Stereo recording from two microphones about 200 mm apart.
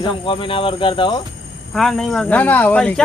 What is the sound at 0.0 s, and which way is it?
Speech, 25° left (ahead or behind).